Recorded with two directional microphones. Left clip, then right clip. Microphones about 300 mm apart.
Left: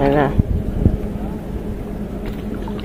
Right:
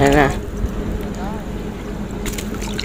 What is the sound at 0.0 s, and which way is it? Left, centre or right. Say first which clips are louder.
Speech: right 2 dB; centre.